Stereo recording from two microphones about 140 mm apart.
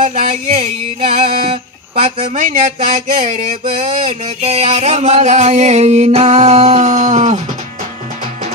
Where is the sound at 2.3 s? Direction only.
70° right (ahead or behind).